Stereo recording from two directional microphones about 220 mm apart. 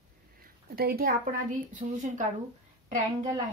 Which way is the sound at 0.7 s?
45° right (ahead or behind).